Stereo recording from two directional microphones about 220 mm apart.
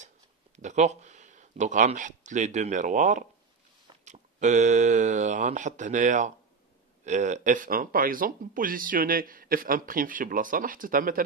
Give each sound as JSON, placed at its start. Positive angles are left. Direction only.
{"t": 0.6, "sound": "speech", "side_deg": -30}